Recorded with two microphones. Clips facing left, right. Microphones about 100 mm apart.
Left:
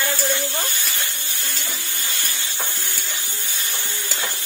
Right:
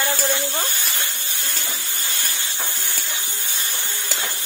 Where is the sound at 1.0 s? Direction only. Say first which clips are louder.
Even; 20° right (ahead or behind).